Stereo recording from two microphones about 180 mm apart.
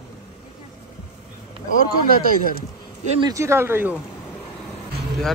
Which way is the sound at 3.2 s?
15° right (ahead or behind).